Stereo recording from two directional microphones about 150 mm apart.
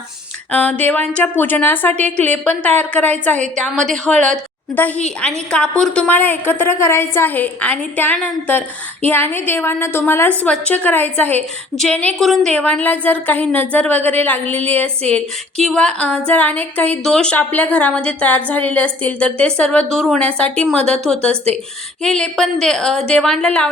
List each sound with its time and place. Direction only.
0.5 s speech: 10° left (ahead or behind)
3.3 s a woman's voice: 55° right (ahead or behind)
3.6 s a woman's voice: 5° left (ahead or behind)